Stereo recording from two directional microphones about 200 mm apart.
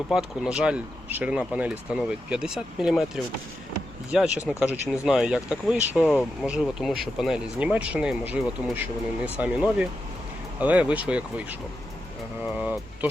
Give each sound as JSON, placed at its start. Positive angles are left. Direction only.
{"t": 0.1, "sound": "speech", "side_deg": -5}
{"t": 4.1, "sound": "speech", "side_deg": -5}
{"t": 12.5, "sound": "speech", "side_deg": -5}